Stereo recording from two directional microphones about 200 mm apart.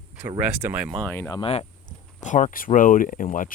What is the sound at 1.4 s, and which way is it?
Speech, 30° left (ahead or behind).